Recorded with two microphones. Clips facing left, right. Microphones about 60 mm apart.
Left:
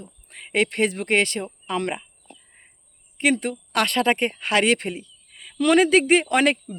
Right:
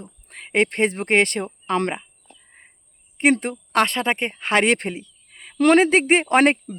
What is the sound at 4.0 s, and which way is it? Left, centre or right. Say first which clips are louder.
Speech: left 2 dB; right.